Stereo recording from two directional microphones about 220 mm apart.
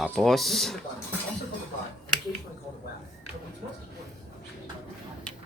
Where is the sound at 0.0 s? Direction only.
Centre (ahead or behind).